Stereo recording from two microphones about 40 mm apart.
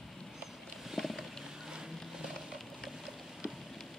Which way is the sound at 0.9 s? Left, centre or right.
Centre.